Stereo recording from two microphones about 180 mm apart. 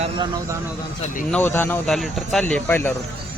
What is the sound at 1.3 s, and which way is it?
Speech, 10° left (ahead or behind).